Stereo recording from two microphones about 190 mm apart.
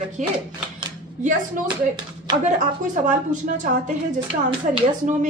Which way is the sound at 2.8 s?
40° right (ahead or behind).